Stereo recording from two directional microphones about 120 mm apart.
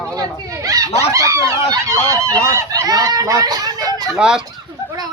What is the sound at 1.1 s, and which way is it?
Speech, 25° right (ahead or behind).